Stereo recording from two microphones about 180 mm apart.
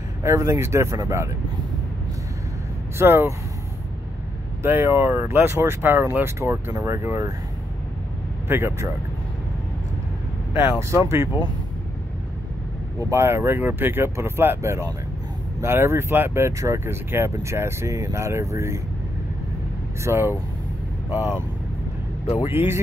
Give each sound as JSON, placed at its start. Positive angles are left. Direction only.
{"t": 0.2, "sound": "speech", "side_deg": -15}
{"t": 3.0, "sound": "speech", "side_deg": -15}
{"t": 4.6, "sound": "speech", "side_deg": -10}
{"t": 8.5, "sound": "speech", "side_deg": -15}
{"t": 10.5, "sound": "speech", "side_deg": -15}
{"t": 13.1, "sound": "speech", "side_deg": -15}
{"t": 20.0, "sound": "speech", "side_deg": -15}